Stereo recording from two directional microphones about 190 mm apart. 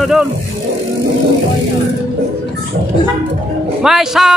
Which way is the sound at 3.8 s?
Centre (ahead or behind).